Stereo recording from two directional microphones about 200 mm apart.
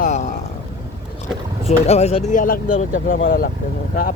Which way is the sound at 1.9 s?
30° left (ahead or behind).